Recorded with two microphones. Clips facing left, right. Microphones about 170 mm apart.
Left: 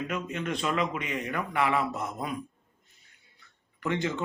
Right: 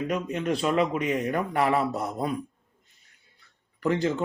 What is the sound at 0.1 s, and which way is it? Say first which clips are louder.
A man's voice: right 5 dB; 40° right (ahead or behind).